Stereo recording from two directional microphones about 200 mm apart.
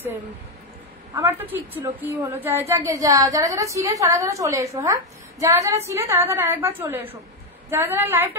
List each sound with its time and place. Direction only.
1.1 s a woman's voice: 10° right (ahead or behind)